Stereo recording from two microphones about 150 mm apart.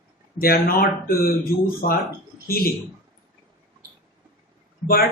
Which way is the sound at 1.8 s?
90° left.